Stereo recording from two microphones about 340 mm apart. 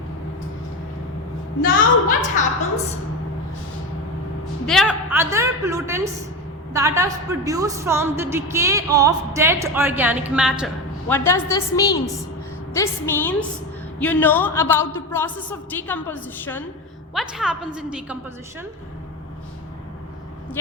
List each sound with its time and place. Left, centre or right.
1.6 s a woman's voice: left
4.6 s a woman's voice: centre
11.1 s a woman's voice: centre